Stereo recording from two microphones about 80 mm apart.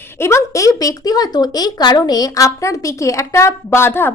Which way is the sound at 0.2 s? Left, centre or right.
Left.